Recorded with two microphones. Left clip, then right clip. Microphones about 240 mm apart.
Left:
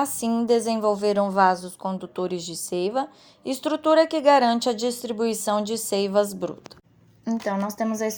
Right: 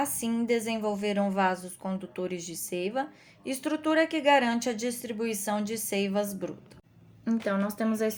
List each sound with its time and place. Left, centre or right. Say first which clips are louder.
0.0 s a woman's voice: left 6 dB; left
7.8 s speech: left 3 dB; centre